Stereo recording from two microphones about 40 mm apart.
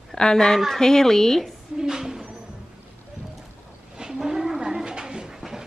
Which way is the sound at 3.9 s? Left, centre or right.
Centre.